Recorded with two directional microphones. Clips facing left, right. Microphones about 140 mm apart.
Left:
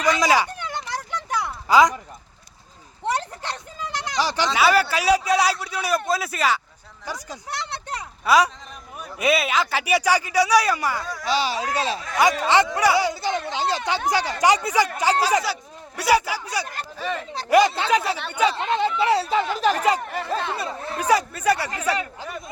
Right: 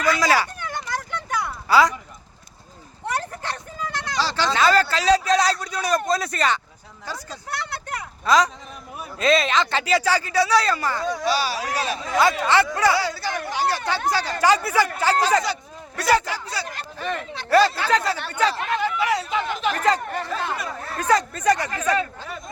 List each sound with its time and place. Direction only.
0.0 s a sound: 15° left (ahead or behind)
3.1 s speech: 20° left (ahead or behind); by 6.6 s 5° left (ahead or behind)
7.0 s a sound: 15° left (ahead or behind)
8.2 s a man's voice: 10° left (ahead or behind)
11.0 s speech: 25° right (ahead or behind)
11.3 s speech: 20° left (ahead or behind)
17.7 s speech: 20° left (ahead or behind)
19.7 s speech: 10° left (ahead or behind)
20.6 s speech: 25° left (ahead or behind)
21.0 s speech: 10° left (ahead or behind)